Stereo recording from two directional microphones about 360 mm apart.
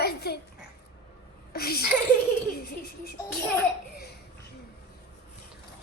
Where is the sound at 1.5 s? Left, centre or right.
Left.